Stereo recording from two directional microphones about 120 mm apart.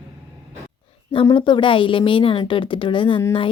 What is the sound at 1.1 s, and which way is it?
A woman's voice, 45° left (ahead or behind).